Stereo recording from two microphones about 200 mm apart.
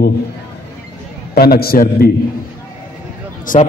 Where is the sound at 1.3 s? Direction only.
50° left (ahead or behind).